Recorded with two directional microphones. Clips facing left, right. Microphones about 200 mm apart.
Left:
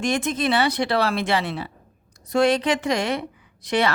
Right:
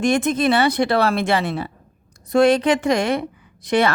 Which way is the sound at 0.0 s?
50° right (ahead or behind).